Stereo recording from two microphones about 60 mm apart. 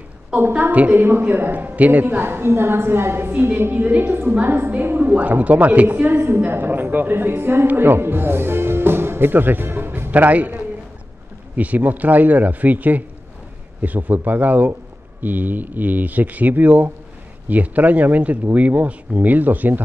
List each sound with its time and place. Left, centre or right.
0.3 s a woman's voice: centre
0.7 s speech: right
0.9 s a woman's voice: right
3.3 s a woman's voice: right